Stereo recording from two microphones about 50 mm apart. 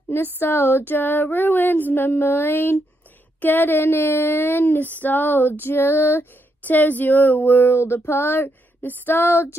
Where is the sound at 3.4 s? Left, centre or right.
Left.